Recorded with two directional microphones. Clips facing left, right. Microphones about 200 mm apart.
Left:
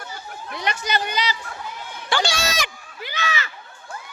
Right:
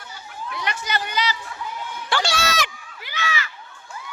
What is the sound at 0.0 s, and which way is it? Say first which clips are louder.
Chatter: left 1 dB; 45° left (ahead or behind).